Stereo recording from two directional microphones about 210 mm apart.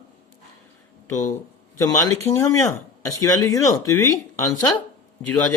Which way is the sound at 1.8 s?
15° left (ahead or behind).